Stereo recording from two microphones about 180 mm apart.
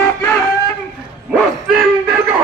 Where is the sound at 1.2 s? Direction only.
Centre (ahead or behind).